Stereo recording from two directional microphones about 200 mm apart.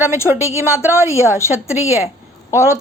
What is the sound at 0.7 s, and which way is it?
A woman's voice, 15° left (ahead or behind).